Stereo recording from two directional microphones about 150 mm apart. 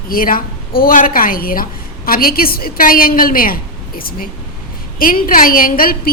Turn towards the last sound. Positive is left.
turn(degrees=75)  # may be behind; listen again after turning